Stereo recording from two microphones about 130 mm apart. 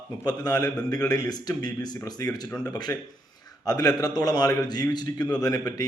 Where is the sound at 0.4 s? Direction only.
30° left (ahead or behind).